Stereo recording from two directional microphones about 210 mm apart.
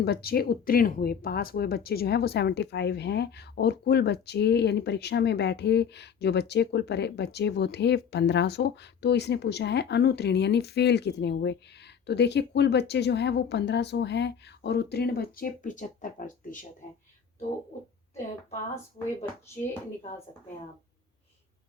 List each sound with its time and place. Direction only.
0.0 s speech: 50° left (ahead or behind)